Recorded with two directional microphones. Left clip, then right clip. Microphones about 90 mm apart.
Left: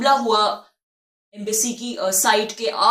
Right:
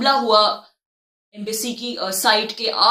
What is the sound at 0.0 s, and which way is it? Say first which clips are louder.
Speech: right 2 dB; 25° right (ahead or behind).